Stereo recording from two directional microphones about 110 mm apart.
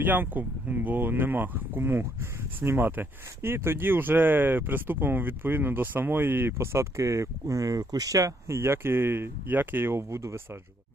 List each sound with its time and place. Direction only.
0.0 s speech: 15° right (ahead or behind)